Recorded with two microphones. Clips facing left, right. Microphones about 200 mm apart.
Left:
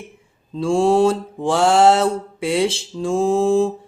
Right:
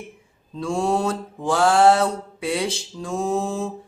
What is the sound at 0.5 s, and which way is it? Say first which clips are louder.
Mantra: left 7 dB; 30° left (ahead or behind).